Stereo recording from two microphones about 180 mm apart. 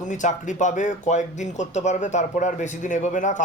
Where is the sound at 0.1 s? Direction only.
45° left (ahead or behind).